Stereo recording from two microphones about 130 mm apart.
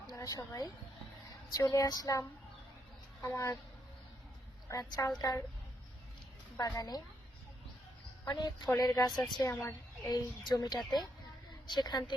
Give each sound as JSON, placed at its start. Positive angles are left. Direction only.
{"t": 0.1, "sound": "a woman's voice", "side_deg": 25}
{"t": 1.5, "sound": "female singing", "side_deg": 25}
{"t": 3.2, "sound": "speech", "side_deg": 25}
{"t": 4.7, "sound": "female singing", "side_deg": 25}
{"t": 6.6, "sound": "female singing", "side_deg": 30}
{"t": 8.2, "sound": "a woman's voice", "side_deg": 30}
{"t": 8.8, "sound": "female singing", "side_deg": 30}
{"t": 9.6, "sound": "a woman's voice", "side_deg": 25}